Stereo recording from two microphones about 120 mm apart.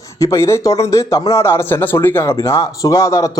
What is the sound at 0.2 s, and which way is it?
A man's voice, 25° left (ahead or behind).